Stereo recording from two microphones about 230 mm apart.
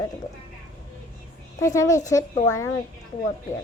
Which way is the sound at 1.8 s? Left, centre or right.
Centre.